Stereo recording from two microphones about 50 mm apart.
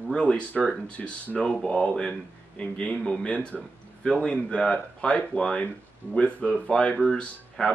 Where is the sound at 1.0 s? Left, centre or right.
Left.